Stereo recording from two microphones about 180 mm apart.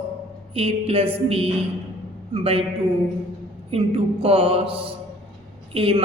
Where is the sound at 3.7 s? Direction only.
30° right (ahead or behind).